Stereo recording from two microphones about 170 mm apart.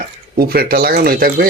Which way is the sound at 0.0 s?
60° right (ahead or behind).